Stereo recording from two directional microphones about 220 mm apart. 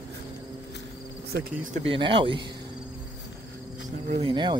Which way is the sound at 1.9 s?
25° right (ahead or behind).